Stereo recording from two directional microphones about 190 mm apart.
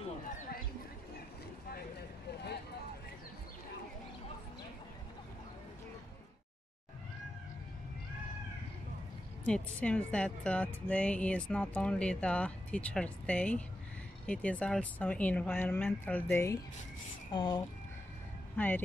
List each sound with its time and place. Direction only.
1.7 s vehicle: 60° left (ahead or behind)
9.5 s speech: 5° left (ahead or behind); by 17.6 s 25° left (ahead or behind)
18.6 s speech: 10° left (ahead or behind)